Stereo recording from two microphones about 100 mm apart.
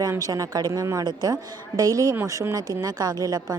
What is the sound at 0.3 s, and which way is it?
A woman's voice, 35° right (ahead or behind).